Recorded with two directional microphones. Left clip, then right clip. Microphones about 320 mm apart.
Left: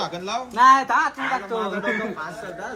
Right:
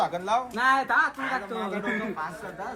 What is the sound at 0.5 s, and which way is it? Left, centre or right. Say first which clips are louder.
Speech: left 10 dB; left.